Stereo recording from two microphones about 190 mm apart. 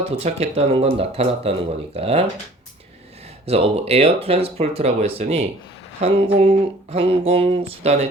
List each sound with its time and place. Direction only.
0.2 s speech: 35° right (ahead or behind)
3.4 s speech: 30° right (ahead or behind)